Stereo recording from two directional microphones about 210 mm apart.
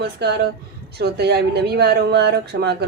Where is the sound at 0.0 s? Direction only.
50° right (ahead or behind).